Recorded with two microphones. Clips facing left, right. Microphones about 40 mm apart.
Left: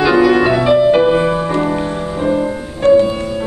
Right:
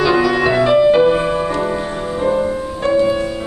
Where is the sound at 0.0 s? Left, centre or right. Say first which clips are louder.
Left 3 dB; centre.